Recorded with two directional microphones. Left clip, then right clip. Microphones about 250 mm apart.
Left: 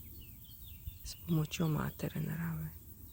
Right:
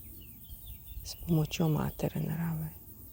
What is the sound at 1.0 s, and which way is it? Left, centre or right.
Speech, centre.